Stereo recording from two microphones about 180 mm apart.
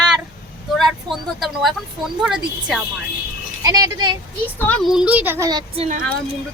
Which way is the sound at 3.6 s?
20° right (ahead or behind).